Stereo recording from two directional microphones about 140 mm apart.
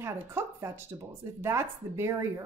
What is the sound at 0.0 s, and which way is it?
A woman's voice, 20° right (ahead or behind).